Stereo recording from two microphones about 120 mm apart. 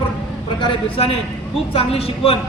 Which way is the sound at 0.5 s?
50° left (ahead or behind).